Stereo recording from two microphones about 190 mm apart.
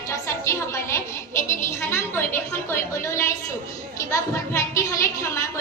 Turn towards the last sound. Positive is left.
turn(degrees=15)  # may be behind; listen again after turning